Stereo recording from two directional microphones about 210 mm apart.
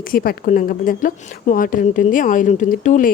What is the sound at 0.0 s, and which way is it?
A woman's voice, 45° left (ahead or behind).